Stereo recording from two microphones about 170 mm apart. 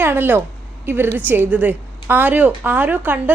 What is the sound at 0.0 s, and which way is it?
A woman's voice, 10° right (ahead or behind).